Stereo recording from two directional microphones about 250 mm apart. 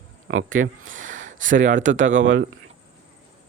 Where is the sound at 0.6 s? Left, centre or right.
Right.